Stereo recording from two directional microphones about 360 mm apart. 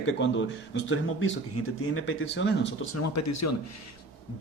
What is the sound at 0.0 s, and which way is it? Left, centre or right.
A man's voice, left.